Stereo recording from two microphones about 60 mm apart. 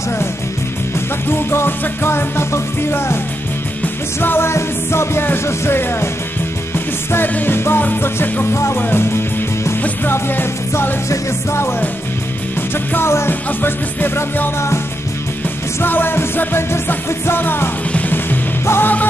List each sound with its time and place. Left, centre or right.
1.5 s music: left
7.3 s music: left
12.9 s music: left
15.8 s music: left